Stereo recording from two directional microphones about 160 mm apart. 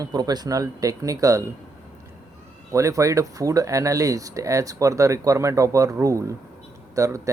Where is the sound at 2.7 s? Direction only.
20° right (ahead or behind).